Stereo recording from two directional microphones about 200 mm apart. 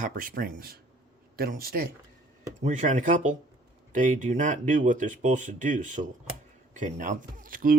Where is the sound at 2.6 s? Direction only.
35° right (ahead or behind).